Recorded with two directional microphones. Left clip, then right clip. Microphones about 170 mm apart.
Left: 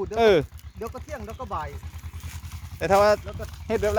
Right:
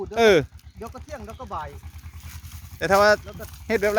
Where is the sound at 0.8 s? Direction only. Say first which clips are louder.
Left 2 dB; 10° left (ahead or behind).